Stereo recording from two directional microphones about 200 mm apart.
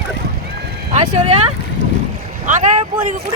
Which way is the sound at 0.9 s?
35° right (ahead or behind).